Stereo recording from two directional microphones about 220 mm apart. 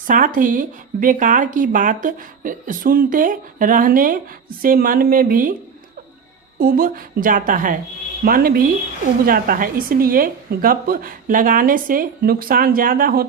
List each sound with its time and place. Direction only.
0.1 s speech: 40° right (ahead or behind)
6.6 s speech: 40° right (ahead or behind)